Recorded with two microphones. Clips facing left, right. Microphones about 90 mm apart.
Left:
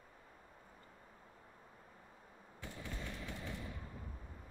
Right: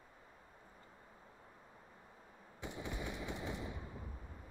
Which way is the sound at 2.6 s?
20° right (ahead or behind).